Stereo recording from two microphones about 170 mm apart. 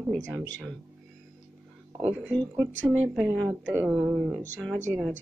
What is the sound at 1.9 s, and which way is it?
Speech, 10° right (ahead or behind).